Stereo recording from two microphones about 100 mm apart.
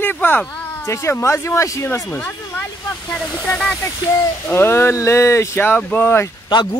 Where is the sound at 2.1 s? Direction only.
15° left (ahead or behind).